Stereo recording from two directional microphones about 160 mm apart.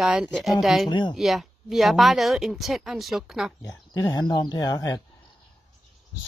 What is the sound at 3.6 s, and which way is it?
Speech, 20° left (ahead or behind).